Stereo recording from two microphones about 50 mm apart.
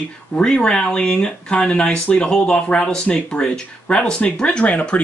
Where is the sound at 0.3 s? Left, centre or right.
Centre.